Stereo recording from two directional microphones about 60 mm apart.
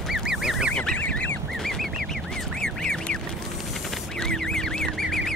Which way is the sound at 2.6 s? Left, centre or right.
Centre.